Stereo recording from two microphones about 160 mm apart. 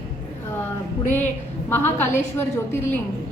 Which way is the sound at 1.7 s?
15° left (ahead or behind).